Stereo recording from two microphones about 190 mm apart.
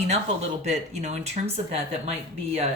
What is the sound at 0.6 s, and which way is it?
Speech, 35° right (ahead or behind).